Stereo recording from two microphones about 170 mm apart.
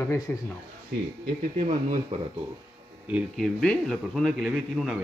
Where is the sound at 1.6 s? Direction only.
45° right (ahead or behind).